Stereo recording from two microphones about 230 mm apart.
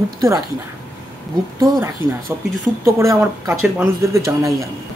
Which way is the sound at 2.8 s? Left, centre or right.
Centre.